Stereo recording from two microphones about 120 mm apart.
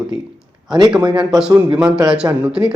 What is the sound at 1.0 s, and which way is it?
Speech, 35° right (ahead or behind).